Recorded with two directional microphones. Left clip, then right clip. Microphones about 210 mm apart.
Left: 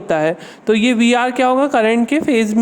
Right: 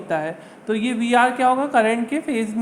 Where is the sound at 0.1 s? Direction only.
50° left (ahead or behind).